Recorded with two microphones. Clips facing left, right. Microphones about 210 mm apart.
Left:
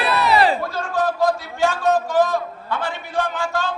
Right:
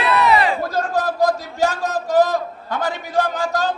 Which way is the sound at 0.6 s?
40° right (ahead or behind).